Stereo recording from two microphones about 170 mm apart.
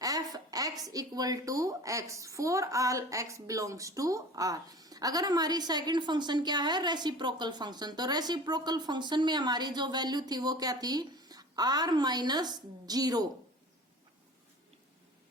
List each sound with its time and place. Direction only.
0.0 s speech: 20° right (ahead or behind)